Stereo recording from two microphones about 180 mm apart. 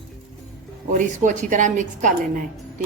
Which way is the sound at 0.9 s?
45° right (ahead or behind).